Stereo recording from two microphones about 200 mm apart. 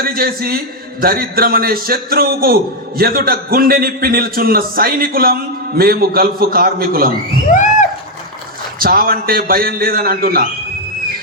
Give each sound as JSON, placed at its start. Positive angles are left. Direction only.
{"t": 0.0, "sound": "a man's voice", "side_deg": -45}
{"t": 7.5, "sound": "a sound", "side_deg": 40}
{"t": 8.8, "sound": "a man's voice", "side_deg": -45}